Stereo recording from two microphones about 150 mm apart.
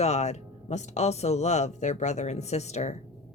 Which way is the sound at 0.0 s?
45° left (ahead or behind).